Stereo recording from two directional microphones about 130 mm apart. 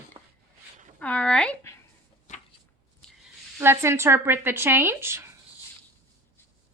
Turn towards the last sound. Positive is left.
turn(degrees=-20)  # may be behind; listen again after turning